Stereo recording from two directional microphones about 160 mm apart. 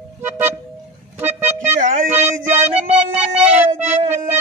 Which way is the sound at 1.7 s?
50° right (ahead or behind).